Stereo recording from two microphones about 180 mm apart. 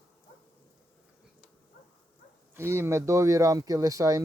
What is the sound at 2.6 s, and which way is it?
Speech, 15° right (ahead or behind).